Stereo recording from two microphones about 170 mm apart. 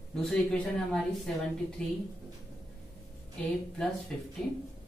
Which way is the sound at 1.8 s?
5° left (ahead or behind).